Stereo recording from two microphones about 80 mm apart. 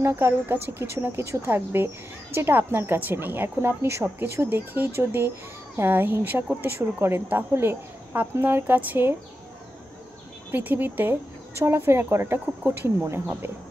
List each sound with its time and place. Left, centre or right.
0.0 s speech: right
10.5 s speech: right